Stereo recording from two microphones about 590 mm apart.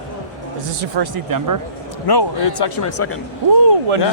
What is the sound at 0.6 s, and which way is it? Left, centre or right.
Speech, right.